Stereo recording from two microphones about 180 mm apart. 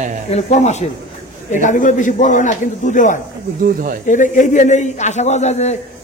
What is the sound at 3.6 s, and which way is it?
Speech, 50° right (ahead or behind).